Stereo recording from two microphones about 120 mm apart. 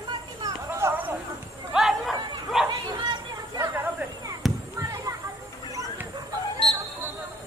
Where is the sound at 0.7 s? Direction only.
20° right (ahead or behind).